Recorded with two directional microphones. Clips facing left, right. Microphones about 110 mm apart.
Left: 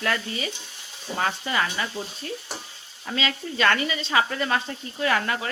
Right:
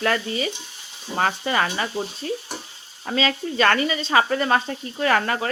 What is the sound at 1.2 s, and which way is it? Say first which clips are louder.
Speech: right 4 dB; 50° right (ahead or behind).